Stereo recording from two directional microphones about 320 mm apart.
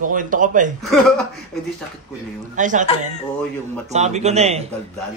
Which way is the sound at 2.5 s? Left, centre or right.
Right.